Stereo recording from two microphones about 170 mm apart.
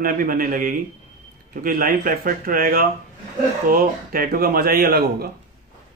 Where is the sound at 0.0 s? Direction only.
55° right (ahead or behind).